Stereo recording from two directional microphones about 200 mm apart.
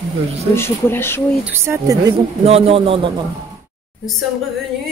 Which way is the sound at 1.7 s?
10° right (ahead or behind).